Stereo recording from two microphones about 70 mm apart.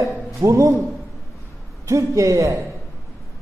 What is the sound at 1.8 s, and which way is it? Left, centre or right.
Speech, right.